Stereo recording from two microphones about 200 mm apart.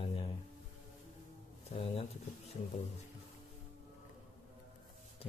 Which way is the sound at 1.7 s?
30° left (ahead or behind).